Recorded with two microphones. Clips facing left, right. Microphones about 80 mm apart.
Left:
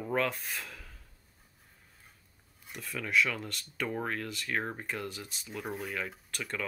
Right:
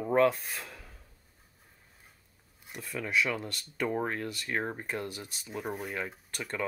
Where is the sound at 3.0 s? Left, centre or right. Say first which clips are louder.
Even; right.